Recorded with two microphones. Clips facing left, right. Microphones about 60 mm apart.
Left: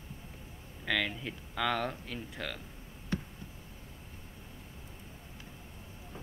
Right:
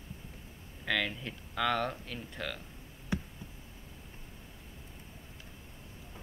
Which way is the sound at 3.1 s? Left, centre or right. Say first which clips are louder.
Even; centre.